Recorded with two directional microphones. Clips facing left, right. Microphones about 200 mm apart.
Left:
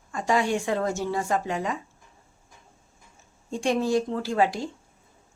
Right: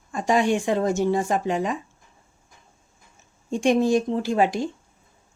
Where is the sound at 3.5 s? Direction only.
20° right (ahead or behind).